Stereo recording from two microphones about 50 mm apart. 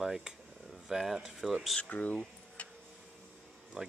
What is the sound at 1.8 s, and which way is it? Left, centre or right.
Speech, left.